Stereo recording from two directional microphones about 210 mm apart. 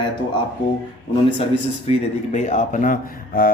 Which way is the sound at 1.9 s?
35° left (ahead or behind).